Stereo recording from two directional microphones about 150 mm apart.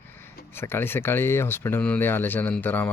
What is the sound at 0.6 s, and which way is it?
Speech, 15° left (ahead or behind).